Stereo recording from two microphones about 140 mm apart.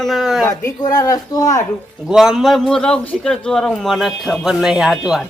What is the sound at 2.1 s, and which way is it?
A man's voice, 5° right (ahead or behind).